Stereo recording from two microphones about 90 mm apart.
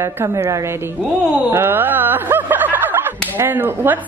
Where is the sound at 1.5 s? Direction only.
25° right (ahead or behind).